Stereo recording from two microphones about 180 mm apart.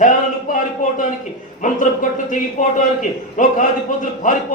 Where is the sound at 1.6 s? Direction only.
45° left (ahead or behind).